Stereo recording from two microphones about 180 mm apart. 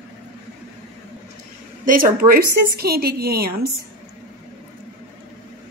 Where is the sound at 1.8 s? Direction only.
50° right (ahead or behind).